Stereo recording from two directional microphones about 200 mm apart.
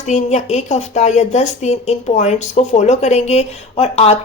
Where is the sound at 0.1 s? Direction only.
35° left (ahead or behind).